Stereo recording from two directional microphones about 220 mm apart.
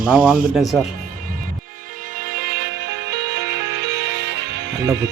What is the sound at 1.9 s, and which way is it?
Music, 40° right (ahead or behind).